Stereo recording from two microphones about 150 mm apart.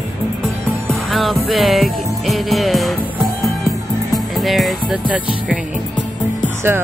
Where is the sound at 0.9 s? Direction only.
Centre (ahead or behind).